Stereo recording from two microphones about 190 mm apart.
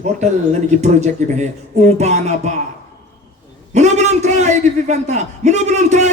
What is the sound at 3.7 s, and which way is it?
A man's voice, 35° right (ahead or behind).